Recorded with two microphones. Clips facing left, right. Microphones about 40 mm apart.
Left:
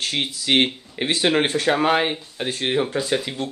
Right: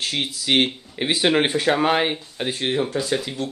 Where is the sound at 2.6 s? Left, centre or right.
Centre.